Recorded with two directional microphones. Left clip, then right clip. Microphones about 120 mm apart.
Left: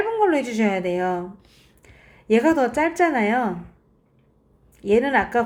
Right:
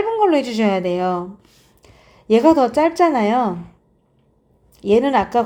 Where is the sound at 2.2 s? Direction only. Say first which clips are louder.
Right 5 dB; 50° right (ahead or behind).